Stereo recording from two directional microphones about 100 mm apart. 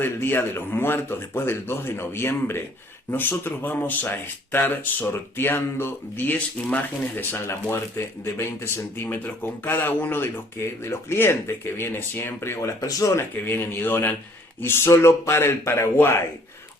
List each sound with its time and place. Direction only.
0.0 s speech: 20° left (ahead or behind)
13.3 s speech: 20° left (ahead or behind)